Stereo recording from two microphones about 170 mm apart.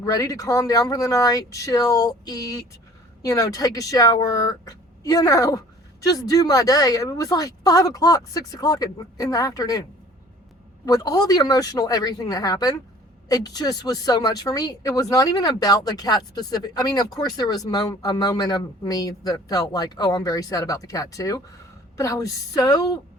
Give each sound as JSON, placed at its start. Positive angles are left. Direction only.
{"t": 0.0, "sound": "speech", "side_deg": 20}
{"t": 10.8, "sound": "speech", "side_deg": 20}